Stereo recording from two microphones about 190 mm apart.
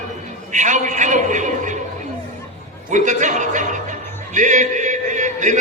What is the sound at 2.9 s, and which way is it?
Speech, 40° right (ahead or behind).